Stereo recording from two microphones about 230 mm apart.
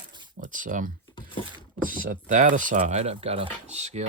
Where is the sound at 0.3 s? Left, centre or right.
Right.